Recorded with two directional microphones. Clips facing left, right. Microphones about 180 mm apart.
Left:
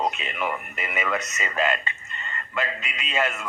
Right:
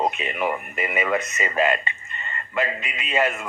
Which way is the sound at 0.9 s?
15° right (ahead or behind).